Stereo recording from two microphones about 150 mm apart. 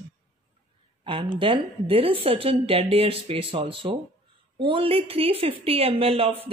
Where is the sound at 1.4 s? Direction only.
40° right (ahead or behind).